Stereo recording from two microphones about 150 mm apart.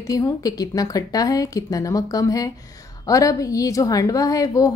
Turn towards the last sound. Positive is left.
turn(degrees=25)  # may be behind; listen again after turning